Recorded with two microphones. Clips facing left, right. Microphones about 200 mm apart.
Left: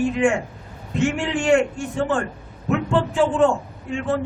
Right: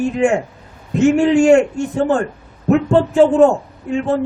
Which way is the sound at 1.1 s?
40° right (ahead or behind).